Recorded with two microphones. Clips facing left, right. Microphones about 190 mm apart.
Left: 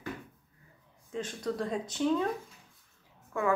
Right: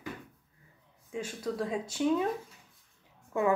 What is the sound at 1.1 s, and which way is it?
Speech, 10° right (ahead or behind).